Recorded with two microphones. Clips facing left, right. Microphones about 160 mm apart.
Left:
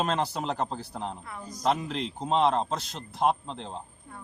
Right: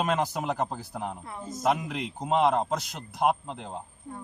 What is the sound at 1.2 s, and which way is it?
Speech, 25° right (ahead or behind).